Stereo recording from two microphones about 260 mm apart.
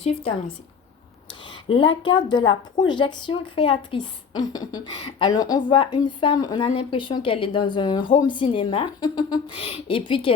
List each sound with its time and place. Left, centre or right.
1.6 s a woman's voice: centre